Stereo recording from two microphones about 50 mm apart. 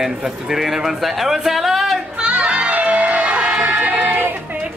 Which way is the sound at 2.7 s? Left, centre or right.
Right.